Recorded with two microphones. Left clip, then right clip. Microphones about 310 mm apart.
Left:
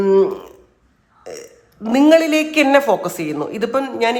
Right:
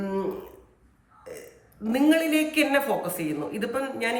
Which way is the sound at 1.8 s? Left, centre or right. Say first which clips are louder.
Left 10 dB; centre.